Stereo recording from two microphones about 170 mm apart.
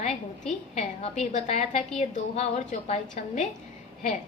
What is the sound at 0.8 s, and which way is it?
A woman's voice, 40° left (ahead or behind).